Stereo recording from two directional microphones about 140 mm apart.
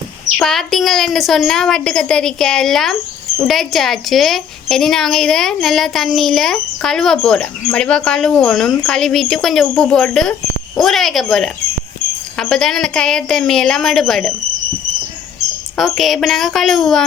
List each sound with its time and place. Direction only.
0.3 s a woman's voice: centre (ahead or behind)
15.8 s a woman's voice: centre (ahead or behind)